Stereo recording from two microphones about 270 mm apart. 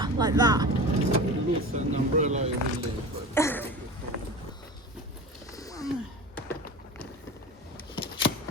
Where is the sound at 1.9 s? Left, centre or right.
Right.